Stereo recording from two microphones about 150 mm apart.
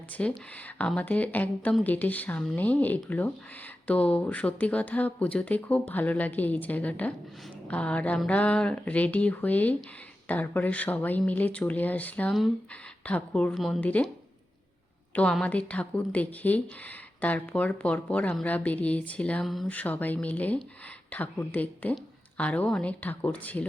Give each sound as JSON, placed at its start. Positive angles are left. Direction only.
{"t": 0.1, "sound": "a woman's voice", "side_deg": 10}
{"t": 15.1, "sound": "a woman's voice", "side_deg": 5}